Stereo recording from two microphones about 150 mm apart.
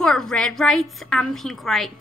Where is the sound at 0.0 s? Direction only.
5° left (ahead or behind).